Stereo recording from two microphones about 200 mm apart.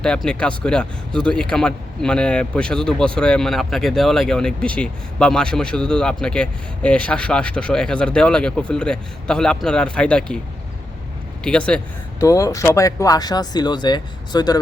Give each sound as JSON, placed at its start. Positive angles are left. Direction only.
{"t": 0.0, "sound": "speech", "side_deg": 5}
{"t": 11.4, "sound": "speech", "side_deg": 5}
{"t": 12.2, "sound": "speech", "side_deg": 15}